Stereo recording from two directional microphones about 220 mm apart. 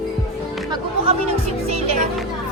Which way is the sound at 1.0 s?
30° right (ahead or behind).